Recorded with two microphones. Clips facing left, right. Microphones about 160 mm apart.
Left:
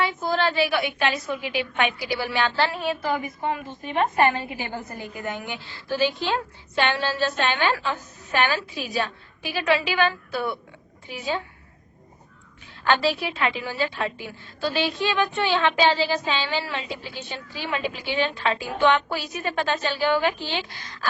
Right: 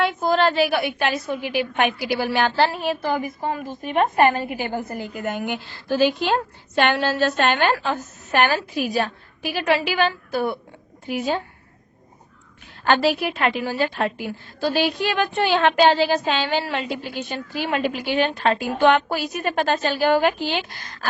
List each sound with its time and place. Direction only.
0.2 s a woman's voice: 50° right (ahead or behind)
10.3 s a woman's voice: 40° right (ahead or behind)
12.8 s a woman's voice: 45° right (ahead or behind)